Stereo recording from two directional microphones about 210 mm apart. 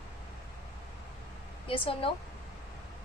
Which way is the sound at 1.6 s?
25° left (ahead or behind).